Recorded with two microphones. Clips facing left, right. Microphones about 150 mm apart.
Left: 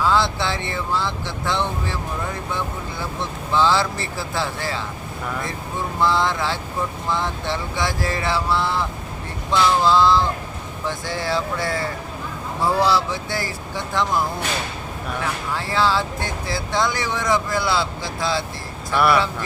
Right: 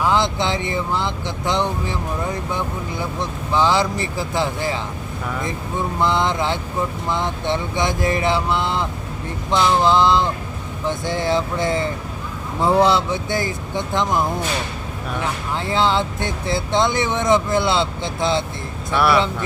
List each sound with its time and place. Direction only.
0.0 s speech: 20° right (ahead or behind)
6.0 s speech: 20° right (ahead or behind)
18.9 s speech: centre (ahead or behind)